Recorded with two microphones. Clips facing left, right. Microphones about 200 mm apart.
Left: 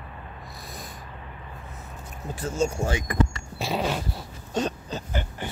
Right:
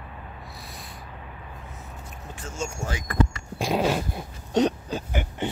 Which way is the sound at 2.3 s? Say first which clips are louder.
Left 8 dB; 35° left (ahead or behind).